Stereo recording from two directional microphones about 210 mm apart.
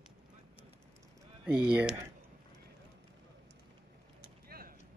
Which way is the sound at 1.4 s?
5° right (ahead or behind).